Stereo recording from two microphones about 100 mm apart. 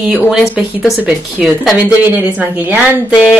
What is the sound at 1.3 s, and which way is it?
Speech, 10° right (ahead or behind).